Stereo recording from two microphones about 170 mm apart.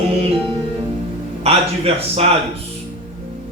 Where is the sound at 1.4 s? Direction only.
35° right (ahead or behind).